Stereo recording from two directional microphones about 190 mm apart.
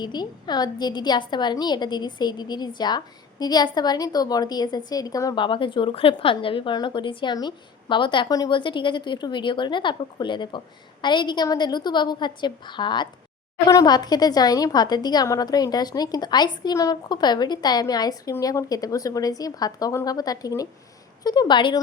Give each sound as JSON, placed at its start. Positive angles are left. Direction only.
{"t": 0.0, "sound": "a woman's voice", "side_deg": 20}